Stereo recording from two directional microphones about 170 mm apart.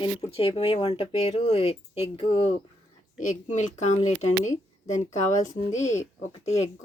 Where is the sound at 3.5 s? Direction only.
45° left (ahead or behind).